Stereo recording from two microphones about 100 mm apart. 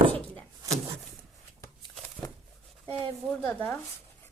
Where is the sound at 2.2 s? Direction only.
35° left (ahead or behind).